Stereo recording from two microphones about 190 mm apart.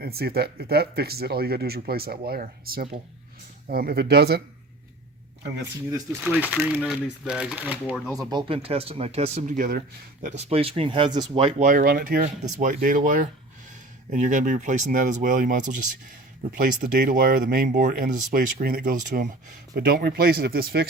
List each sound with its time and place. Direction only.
0.0 s speech: 55° right (ahead or behind)
5.9 s speech: 10° right (ahead or behind)
8.1 s speech: 20° right (ahead or behind); by 9.8 s 50° right (ahead or behind)
10.2 s speech: 35° right (ahead or behind)
11.7 s speech: 50° right (ahead or behind)